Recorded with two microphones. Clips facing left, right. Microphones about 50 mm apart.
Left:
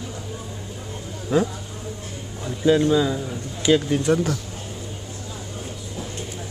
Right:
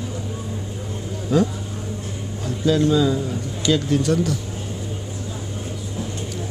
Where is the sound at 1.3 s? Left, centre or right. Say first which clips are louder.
Right 2 dB; left.